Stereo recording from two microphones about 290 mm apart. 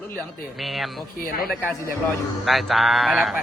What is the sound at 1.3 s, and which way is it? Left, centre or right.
Speech, left.